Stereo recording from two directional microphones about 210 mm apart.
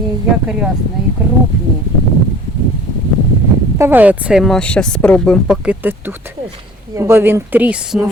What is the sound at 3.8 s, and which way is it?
Speech, 10° right (ahead or behind).